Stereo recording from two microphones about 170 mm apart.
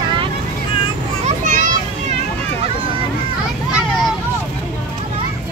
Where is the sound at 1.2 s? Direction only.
50° right (ahead or behind).